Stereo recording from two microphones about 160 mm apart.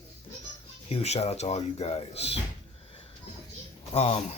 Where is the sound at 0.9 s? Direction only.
40° left (ahead or behind).